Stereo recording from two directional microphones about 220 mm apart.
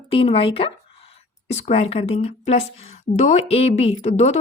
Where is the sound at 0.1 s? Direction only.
25° left (ahead or behind).